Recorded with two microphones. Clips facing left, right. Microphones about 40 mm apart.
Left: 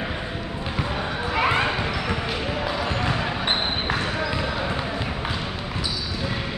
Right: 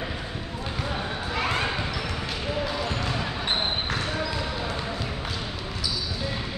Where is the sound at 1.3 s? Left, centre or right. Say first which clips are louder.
Left 5 dB; left.